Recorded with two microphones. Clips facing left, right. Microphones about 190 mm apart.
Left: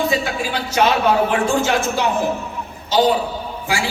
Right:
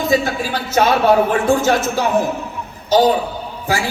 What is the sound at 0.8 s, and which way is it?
Speech, 40° right (ahead or behind).